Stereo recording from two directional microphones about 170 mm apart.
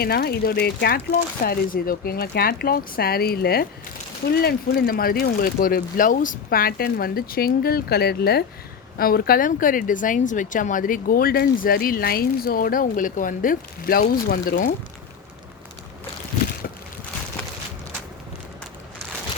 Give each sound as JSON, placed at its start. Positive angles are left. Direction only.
{"t": 0.0, "sound": "speech", "side_deg": 65}